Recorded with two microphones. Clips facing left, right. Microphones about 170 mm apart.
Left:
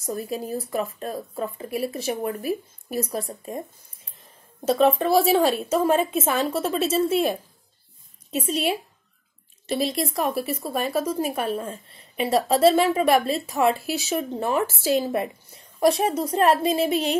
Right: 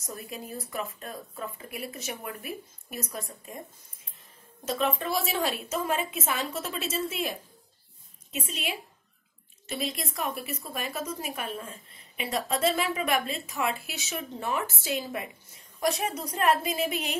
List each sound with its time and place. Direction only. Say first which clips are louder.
0.0 s speech: left 10 dB; 35° left (ahead or behind)
4.6 s speech: left 10 dB; 35° left (ahead or behind)
9.7 s speech: left 9 dB; 35° left (ahead or behind)